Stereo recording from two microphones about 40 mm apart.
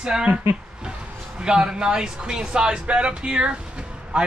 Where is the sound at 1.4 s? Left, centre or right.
Right.